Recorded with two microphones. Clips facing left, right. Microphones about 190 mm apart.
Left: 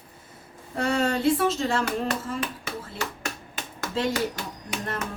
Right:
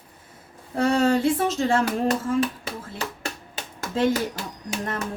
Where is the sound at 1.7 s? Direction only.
50° right (ahead or behind).